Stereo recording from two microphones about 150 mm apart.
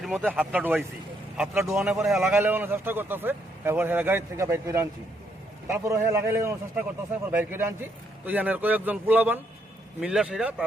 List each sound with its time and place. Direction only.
0.0 s speech: centre (ahead or behind)
2.3 s a man's voice: 15° right (ahead or behind)